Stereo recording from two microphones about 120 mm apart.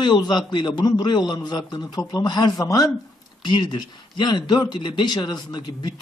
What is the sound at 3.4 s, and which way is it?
Speech, 40° left (ahead or behind).